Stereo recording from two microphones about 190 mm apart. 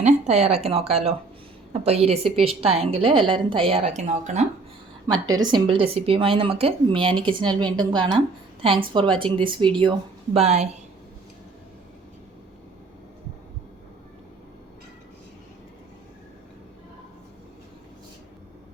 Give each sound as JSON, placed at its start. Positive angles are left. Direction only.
{"t": 0.0, "sound": "a woman's voice", "side_deg": -35}
{"t": 5.2, "sound": "a woman's voice", "side_deg": -20}